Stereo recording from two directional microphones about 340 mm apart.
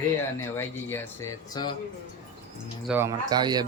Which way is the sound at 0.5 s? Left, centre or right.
Centre.